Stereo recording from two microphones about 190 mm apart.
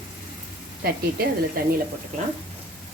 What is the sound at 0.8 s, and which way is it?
Speech, 55° right (ahead or behind).